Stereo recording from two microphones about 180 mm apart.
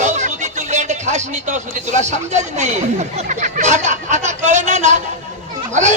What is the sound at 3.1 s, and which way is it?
Speech, 40° right (ahead or behind).